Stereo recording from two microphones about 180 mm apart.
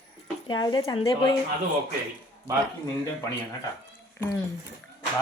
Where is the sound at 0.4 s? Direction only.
25° left (ahead or behind).